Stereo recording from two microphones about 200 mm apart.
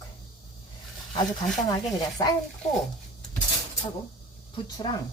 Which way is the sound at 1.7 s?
20° left (ahead or behind).